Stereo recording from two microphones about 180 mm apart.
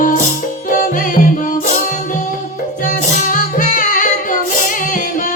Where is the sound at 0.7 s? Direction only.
50° left (ahead or behind).